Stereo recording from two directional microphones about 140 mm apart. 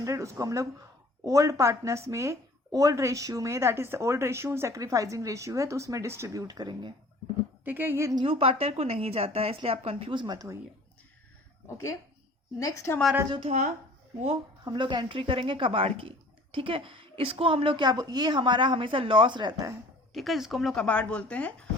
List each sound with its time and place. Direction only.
0.0 s speech: 20° right (ahead or behind)
7.6 s a woman's voice: 15° right (ahead or behind)
8.2 s a woman's voice: 40° right (ahead or behind); by 10.6 s 25° right (ahead or behind)
12.5 s a woman's voice: 20° left (ahead or behind)
13.5 s a woman's voice: 40° right (ahead or behind)
20.1 s a woman's voice: centre (ahead or behind)